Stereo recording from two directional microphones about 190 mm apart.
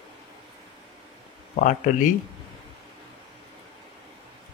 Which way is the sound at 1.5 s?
40° left (ahead or behind).